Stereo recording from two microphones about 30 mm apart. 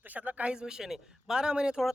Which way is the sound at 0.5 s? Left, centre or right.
Right.